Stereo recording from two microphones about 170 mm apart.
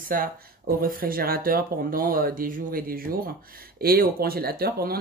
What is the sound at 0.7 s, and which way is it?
Speech, 60° right (ahead or behind).